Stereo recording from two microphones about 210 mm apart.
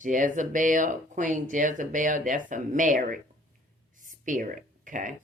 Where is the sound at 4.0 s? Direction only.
40° right (ahead or behind).